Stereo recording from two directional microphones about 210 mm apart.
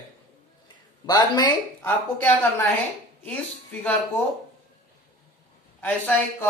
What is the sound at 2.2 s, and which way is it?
Speech, 10° left (ahead or behind).